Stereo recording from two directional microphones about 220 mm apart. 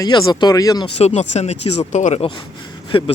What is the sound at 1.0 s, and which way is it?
Speech, 30° left (ahead or behind).